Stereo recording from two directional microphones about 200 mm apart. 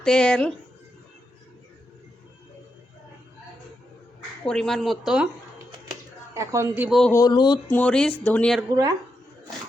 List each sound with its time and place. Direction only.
0.0 s speech: 5° left (ahead or behind)
4.4 s speech: 5° left (ahead or behind)
5.9 s a sound: 15° right (ahead or behind)
7.0 s speech: 15° left (ahead or behind)
7.7 s speech: 5° left (ahead or behind)